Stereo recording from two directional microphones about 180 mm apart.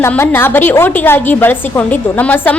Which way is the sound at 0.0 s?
10° left (ahead or behind).